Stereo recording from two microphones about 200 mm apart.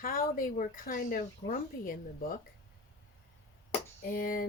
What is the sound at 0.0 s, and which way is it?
Speech, 45° left (ahead or behind).